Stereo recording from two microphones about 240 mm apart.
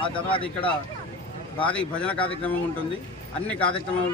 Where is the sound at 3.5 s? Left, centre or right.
Centre.